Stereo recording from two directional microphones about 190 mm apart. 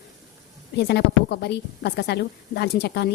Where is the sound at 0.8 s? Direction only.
60° left (ahead or behind).